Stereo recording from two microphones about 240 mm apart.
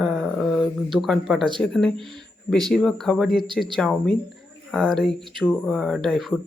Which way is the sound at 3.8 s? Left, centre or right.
Centre.